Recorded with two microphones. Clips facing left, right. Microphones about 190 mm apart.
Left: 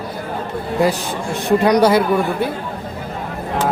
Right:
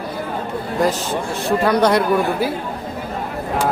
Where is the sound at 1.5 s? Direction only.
15° left (ahead or behind).